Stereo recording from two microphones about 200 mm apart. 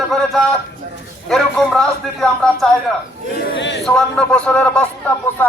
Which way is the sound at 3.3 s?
65° left (ahead or behind).